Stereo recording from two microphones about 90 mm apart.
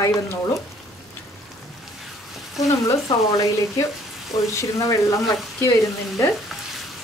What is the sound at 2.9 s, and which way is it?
Speech, 40° left (ahead or behind).